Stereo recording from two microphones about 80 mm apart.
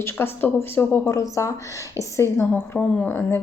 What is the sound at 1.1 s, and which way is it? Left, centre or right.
Speech, left.